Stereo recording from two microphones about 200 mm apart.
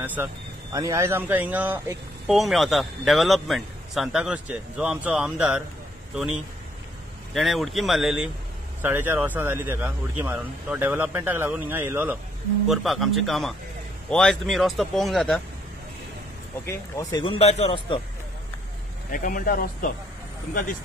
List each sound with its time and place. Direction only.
0.0 s speech: 10° right (ahead or behind)
7.3 s speech: centre (ahead or behind)
16.6 s speech: 15° left (ahead or behind)
17.2 s a man's voice: 30° left (ahead or behind)
19.1 s speech: 45° left (ahead or behind)